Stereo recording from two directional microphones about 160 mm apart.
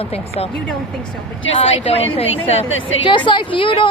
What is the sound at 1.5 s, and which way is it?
A woman's voice, 35° left (ahead or behind).